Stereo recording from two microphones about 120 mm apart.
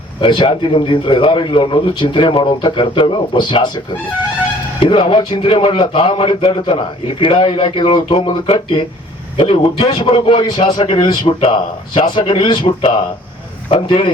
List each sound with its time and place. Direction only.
0.2 s speech: 45° left (ahead or behind)
4.8 s a man's voice: 45° left (ahead or behind)